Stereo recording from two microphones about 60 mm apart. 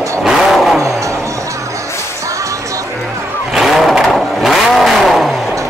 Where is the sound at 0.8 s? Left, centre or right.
Right.